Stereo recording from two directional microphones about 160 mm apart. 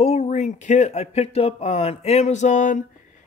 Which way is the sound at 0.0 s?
45° left (ahead or behind).